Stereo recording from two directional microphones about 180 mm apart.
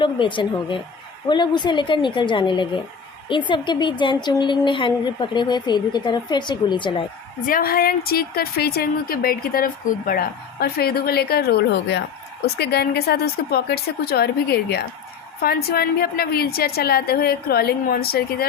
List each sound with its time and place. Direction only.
0.0 s a woman's voice: 25° left (ahead or behind)
7.4 s speech: 55° left (ahead or behind)